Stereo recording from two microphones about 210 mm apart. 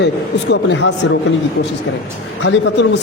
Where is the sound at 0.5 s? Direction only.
55° left (ahead or behind).